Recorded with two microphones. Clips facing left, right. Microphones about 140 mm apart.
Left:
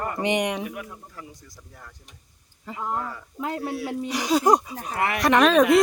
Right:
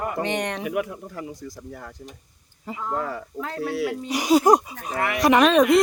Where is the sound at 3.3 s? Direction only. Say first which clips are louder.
Left 1 dB; 15° left (ahead or behind).